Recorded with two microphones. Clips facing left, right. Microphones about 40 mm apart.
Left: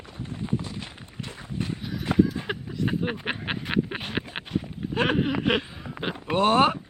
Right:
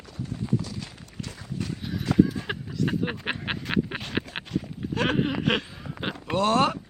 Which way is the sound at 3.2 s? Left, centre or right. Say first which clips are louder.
Even; centre.